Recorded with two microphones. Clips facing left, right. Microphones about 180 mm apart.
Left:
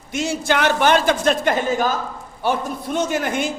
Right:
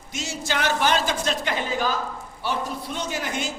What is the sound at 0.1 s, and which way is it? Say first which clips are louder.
A man's voice: left 8 dB; 55° left (ahead or behind).